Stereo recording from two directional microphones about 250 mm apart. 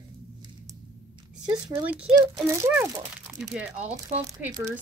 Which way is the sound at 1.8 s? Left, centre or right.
Centre.